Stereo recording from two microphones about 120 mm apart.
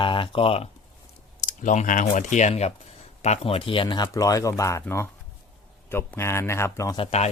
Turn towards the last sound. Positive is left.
turn(degrees=60)  # may be behind; listen again after turning